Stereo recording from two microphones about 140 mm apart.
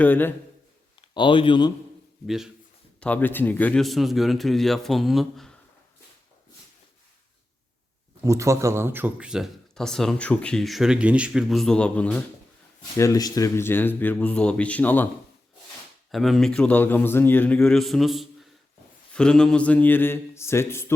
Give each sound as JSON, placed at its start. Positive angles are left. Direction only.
{"t": 0.0, "sound": "speech", "side_deg": 15}
{"t": 1.1, "sound": "speech", "side_deg": 35}
{"t": 2.2, "sound": "speech", "side_deg": -5}
{"t": 3.0, "sound": "speech", "side_deg": 10}
{"t": 8.2, "sound": "speech", "side_deg": -20}
{"t": 13.0, "sound": "speech", "side_deg": 25}
{"t": 16.1, "sound": "speech", "side_deg": 0}